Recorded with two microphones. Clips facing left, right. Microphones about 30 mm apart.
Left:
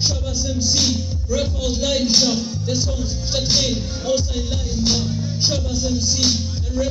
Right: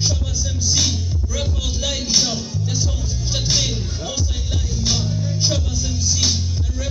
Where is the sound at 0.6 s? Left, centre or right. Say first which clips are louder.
Left 1 dB; left.